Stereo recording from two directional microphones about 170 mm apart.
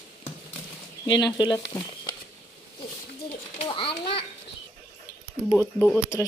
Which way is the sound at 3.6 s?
30° left (ahead or behind).